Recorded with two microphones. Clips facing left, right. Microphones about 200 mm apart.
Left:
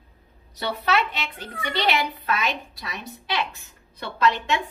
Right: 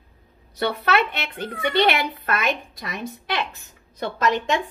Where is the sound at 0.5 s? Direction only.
55° right (ahead or behind).